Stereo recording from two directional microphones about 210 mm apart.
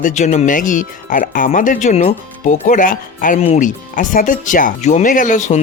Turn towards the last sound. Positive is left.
turn(degrees=35)  # may be behind; listen again after turning